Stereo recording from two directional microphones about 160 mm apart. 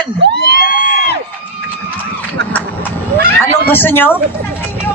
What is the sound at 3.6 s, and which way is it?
Speech, 15° left (ahead or behind).